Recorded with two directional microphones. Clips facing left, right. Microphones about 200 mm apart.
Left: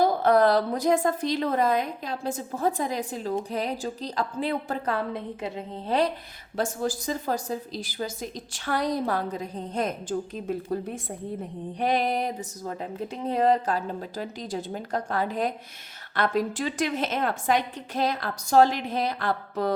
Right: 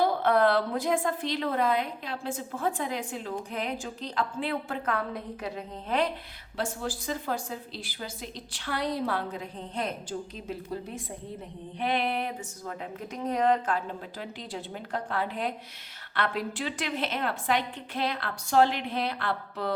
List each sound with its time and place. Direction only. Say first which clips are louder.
0.0 s speech: left 3 dB; 40° left (ahead or behind)
6.6 s a woman's voice: left 5 dB; 45° left (ahead or behind)